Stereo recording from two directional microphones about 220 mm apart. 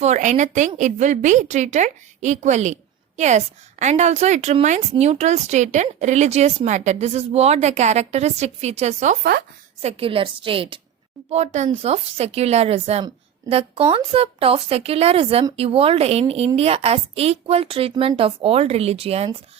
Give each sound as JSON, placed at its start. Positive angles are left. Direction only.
{"t": 0.0, "sound": "a woman's voice", "side_deg": -30}